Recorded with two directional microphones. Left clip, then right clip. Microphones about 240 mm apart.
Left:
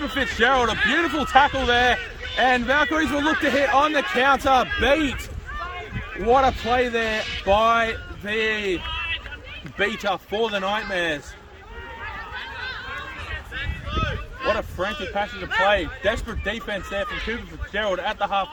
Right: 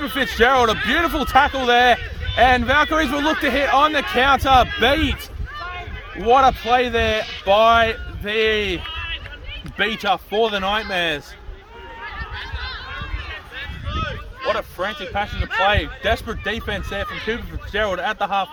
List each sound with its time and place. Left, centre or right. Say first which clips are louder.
0.0 s speech: right 3 dB; right
6.2 s a man's voice: right 4 dB; right
12.4 s run: even; right
13.6 s a sound: even; centre
14.5 s a sound: right 3 dB; right
15.1 s a man's voice: right 2 dB; right